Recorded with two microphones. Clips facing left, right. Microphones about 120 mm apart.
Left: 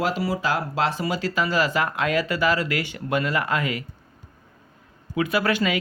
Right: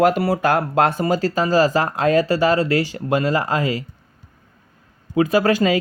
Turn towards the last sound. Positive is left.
turn(degrees=-35)  # may be behind; listen again after turning